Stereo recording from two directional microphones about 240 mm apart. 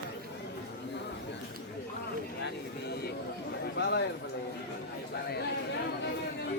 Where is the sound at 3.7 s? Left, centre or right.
Left.